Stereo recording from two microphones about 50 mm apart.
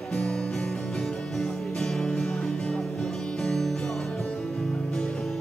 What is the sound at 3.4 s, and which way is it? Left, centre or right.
Music, centre.